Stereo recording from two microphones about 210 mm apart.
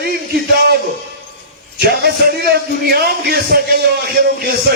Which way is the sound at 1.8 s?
50° right (ahead or behind).